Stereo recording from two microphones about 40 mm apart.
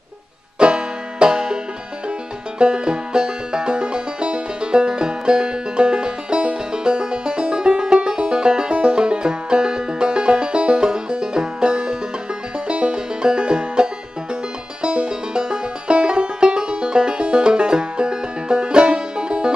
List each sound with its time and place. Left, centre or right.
0.6 s banjo: right
2.6 s music: right
14.8 s banjo: right